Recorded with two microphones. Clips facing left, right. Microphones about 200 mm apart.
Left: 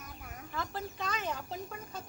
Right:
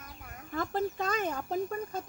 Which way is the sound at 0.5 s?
50° right (ahead or behind).